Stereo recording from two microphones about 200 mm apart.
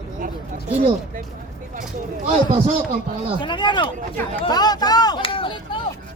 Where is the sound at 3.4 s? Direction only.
25° left (ahead or behind).